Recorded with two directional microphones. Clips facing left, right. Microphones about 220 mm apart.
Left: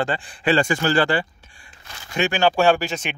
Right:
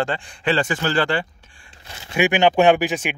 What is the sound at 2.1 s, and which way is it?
Speech, 15° right (ahead or behind).